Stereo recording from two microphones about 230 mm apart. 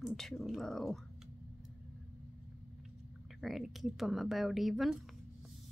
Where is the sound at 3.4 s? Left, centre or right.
Centre.